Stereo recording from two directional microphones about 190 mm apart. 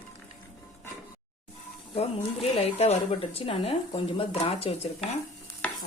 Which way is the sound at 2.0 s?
35° left (ahead or behind).